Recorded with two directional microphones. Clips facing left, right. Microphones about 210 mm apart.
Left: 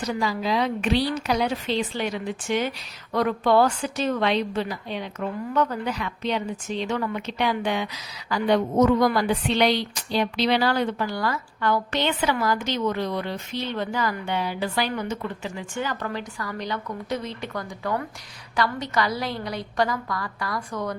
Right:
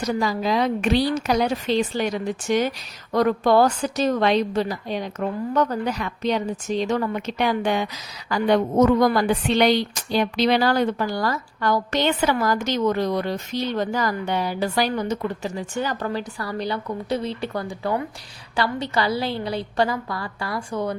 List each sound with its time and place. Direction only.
0.0 s a woman's voice: 45° right (ahead or behind)